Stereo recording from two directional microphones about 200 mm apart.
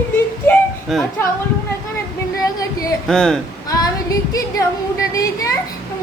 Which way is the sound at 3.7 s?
20° left (ahead or behind).